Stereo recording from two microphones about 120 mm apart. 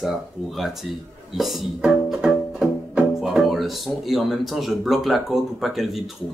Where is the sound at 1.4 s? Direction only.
Centre (ahead or behind).